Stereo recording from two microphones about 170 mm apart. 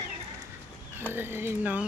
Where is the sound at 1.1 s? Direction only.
15° right (ahead or behind).